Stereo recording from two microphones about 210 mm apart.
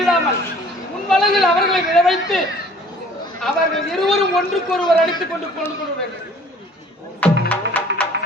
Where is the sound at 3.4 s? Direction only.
Centre (ahead or behind).